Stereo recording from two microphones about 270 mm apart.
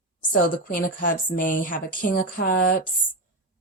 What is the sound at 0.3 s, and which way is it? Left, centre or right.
A woman's voice, left.